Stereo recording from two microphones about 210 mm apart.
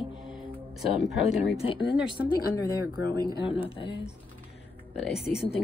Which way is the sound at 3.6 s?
25° left (ahead or behind).